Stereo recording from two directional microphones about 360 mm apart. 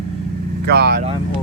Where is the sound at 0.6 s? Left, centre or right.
Right.